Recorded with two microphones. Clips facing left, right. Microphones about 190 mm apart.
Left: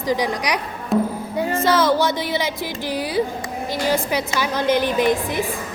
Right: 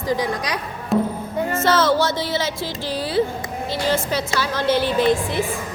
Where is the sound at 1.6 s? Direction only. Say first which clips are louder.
Even; 15° left (ahead or behind).